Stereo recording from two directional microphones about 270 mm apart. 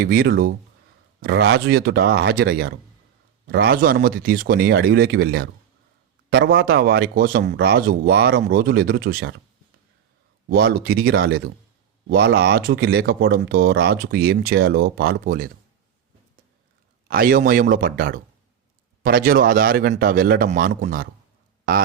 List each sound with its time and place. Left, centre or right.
0.0 s speech: right
10.5 s speech: right
17.1 s speech: right
21.6 s a sound: right